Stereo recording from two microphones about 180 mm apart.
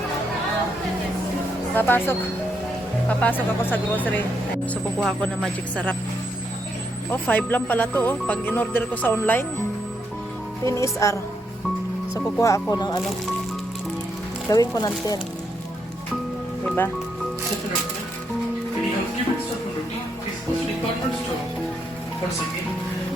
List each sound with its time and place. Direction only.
1.7 s speech: 10° left (ahead or behind)
4.9 s speech: centre (ahead or behind)
7.1 s speech: 10° left (ahead or behind)
10.6 s speech: 15° left (ahead or behind)
12.4 s speech: 15° left (ahead or behind)
14.5 s speech: 20° left (ahead or behind)
16.6 s speech: 10° left (ahead or behind)